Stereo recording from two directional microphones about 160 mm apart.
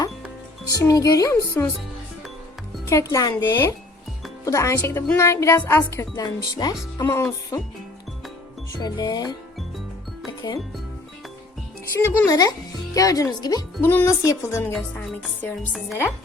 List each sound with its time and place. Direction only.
0.6 s speech: 20° left (ahead or behind)
2.8 s speech: 20° left (ahead or behind)
8.8 s speech: 25° left (ahead or behind)
11.9 s speech: 20° left (ahead or behind)